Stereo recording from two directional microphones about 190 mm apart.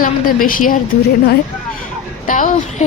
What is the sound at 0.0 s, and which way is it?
Speech, 45° left (ahead or behind).